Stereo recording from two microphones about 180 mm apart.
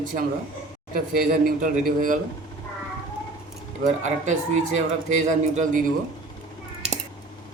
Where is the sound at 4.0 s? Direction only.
40° right (ahead or behind).